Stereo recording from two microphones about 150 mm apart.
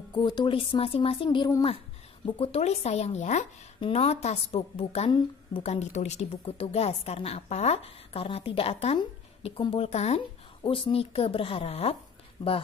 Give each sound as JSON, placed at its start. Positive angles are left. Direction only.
{"t": 0.1, "sound": "a woman's voice", "side_deg": 30}
{"t": 3.8, "sound": "a woman's voice", "side_deg": 40}
{"t": 10.6, "sound": "speech", "side_deg": 35}